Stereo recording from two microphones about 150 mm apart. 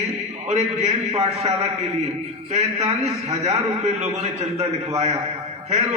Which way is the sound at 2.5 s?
45° right (ahead or behind).